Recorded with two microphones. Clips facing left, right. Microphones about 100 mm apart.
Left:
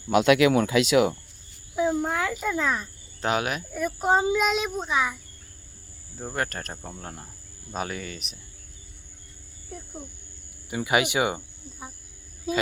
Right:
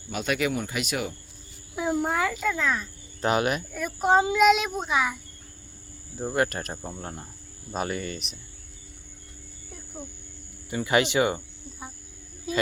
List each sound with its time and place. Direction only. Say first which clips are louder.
0.1 s speech: left 9 dB; 90° left
1.7 s a child's voice: left 1 dB; 5° right (ahead or behind)
2.5 s speech: even; 20° left (ahead or behind)
3.2 s a child's voice: right 2 dB; centre (ahead or behind)
6.1 s a child's voice: right 4 dB; 5° right (ahead or behind)
10.7 s speech: right 1 dB; 15° left (ahead or behind)